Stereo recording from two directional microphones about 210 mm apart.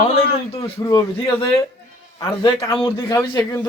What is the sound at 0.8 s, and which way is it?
A man's voice, 20° left (ahead or behind).